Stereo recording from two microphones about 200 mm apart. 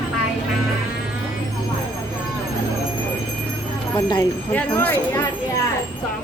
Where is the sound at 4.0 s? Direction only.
20° left (ahead or behind).